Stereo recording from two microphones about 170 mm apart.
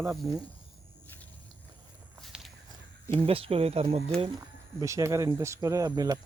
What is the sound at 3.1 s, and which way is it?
Speech, 35° right (ahead or behind).